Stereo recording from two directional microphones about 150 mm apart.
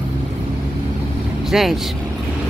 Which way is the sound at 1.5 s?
Centre (ahead or behind).